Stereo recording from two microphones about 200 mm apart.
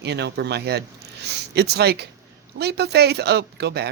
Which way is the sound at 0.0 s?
55° right (ahead or behind).